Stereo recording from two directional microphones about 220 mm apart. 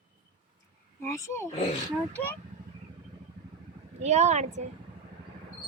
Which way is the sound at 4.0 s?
30° right (ahead or behind).